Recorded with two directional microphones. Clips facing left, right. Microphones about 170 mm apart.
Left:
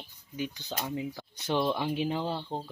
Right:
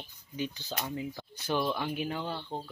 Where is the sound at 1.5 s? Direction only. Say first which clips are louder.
Left 2 dB; 20° left (ahead or behind).